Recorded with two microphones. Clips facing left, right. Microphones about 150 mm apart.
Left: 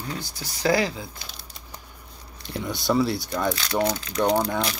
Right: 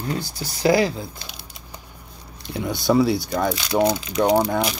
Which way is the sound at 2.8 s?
10° right (ahead or behind).